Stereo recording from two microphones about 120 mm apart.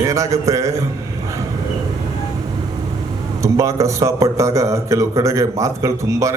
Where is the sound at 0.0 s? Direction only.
25° right (ahead or behind).